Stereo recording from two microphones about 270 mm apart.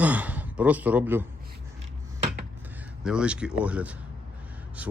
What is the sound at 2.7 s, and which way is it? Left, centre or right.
Speech, centre.